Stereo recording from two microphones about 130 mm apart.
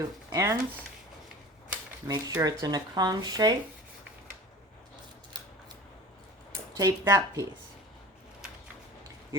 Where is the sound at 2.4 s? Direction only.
30° right (ahead or behind).